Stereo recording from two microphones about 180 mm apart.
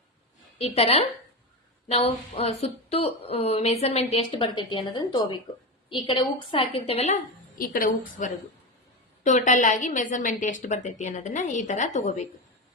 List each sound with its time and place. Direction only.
0.6 s a woman's voice: 35° left (ahead or behind)